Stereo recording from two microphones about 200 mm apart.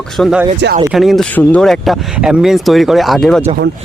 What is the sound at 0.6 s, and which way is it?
Speech, 60° right (ahead or behind).